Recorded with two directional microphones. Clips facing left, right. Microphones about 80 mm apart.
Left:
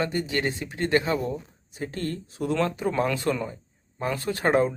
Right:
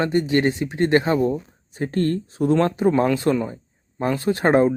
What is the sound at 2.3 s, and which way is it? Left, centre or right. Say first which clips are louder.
Speech: right 4 dB; right.